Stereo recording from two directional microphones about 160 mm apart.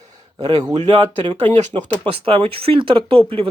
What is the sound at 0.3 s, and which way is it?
Speech, 25° right (ahead or behind).